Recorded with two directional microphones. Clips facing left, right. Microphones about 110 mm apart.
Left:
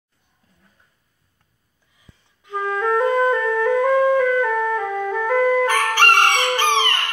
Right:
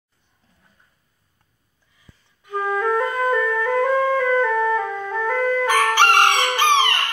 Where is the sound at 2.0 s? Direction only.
20° left (ahead or behind).